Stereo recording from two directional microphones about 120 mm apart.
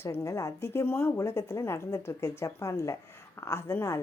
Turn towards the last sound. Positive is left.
turn(degrees=25)  # may be behind; listen again after turning